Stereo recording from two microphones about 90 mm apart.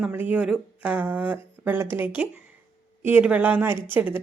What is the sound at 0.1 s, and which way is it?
A woman's voice, 20° right (ahead or behind).